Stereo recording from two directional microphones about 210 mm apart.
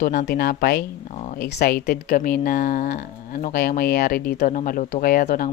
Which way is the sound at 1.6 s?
45° left (ahead or behind).